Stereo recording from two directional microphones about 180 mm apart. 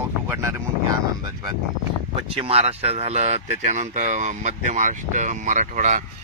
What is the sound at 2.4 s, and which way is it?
Speech, 35° right (ahead or behind).